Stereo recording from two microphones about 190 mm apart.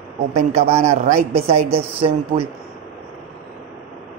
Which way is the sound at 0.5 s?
35° right (ahead or behind).